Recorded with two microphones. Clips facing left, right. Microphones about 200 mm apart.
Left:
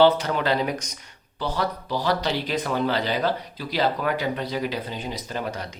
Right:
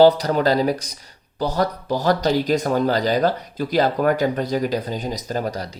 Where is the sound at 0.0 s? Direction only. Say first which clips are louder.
Right 5 dB; 40° right (ahead or behind).